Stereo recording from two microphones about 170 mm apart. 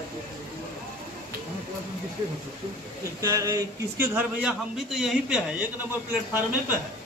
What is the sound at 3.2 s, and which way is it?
A man's voice, 20° right (ahead or behind).